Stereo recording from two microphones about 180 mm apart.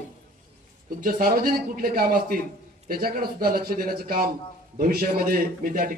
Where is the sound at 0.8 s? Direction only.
50° right (ahead or behind).